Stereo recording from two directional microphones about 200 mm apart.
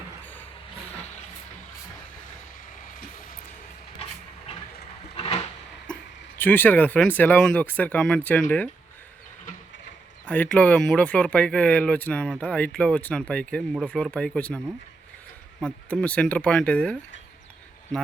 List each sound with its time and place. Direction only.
5.1 s a sound: 30° left (ahead or behind)
6.3 s speech: 10° left (ahead or behind)
10.2 s speech: 5° left (ahead or behind)
15.6 s speech: 5° left (ahead or behind)